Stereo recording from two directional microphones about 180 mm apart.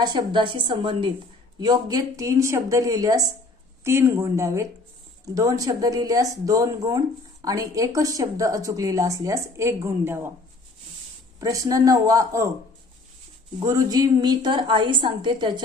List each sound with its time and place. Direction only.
0.0 s speech: 25° right (ahead or behind)
11.3 s speech: 20° right (ahead or behind)
13.6 s speech: 20° right (ahead or behind)